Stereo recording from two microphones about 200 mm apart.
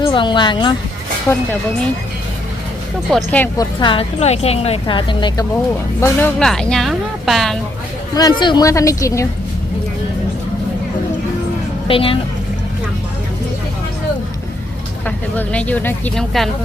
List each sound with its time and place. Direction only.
0.0 s a woman's voice: 25° left (ahead or behind)
1.3 s speech: 10° left (ahead or behind)
3.1 s speech: 5° left (ahead or behind)
3.8 s a woman's voice: 25° left (ahead or behind)
6.0 s a woman's voice: 10° left (ahead or behind)
8.1 s speech: 20° left (ahead or behind)
11.9 s speech: 25° left (ahead or behind)
15.0 s speech: 5° left (ahead or behind)